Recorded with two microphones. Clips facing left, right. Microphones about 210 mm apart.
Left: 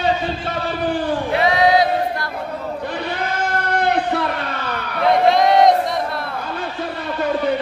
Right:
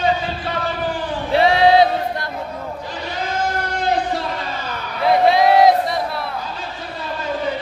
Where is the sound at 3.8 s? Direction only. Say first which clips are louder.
Left 2 dB; 60° left (ahead or behind).